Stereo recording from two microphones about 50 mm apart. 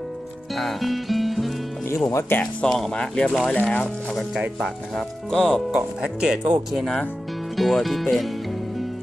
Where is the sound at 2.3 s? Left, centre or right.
Left.